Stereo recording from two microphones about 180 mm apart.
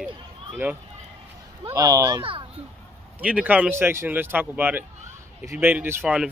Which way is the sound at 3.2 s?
5° right (ahead or behind).